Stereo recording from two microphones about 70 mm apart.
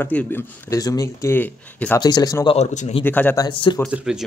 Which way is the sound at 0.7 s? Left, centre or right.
Left.